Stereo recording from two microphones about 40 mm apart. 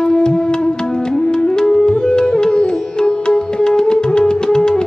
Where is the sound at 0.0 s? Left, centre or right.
Centre.